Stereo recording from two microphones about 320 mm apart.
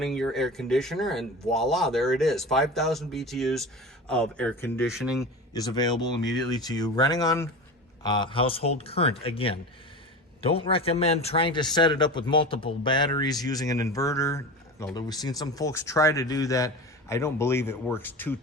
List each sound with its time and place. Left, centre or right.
0.0 s speech: centre
5.5 s speech: centre